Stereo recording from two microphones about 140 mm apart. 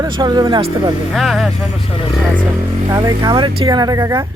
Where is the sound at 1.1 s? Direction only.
Centre (ahead or behind).